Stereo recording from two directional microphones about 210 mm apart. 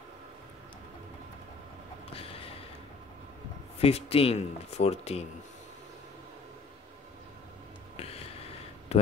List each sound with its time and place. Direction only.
3.8 s speech: 30° left (ahead or behind)
8.0 s a sound: 30° left (ahead or behind)
8.9 s speech: 30° left (ahead or behind)